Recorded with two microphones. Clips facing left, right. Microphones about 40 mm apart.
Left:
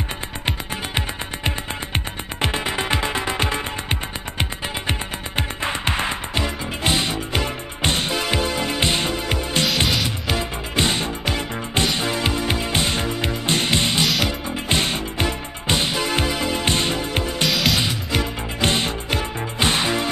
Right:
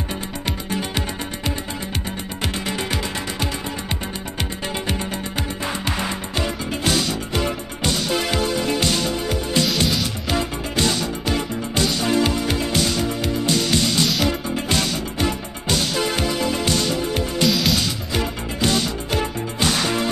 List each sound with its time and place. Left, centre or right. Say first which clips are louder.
0.5 s music: right 1 dB; left
10.8 s music: even; left
14.0 s music: even; centre
14.7 s music: left 2 dB; left
17.5 s music: right 1 dB; centre
18.6 s music: even; left
19.6 s whip: left 1 dB; left